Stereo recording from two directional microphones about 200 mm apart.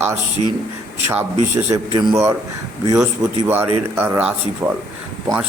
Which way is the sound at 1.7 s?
15° right (ahead or behind).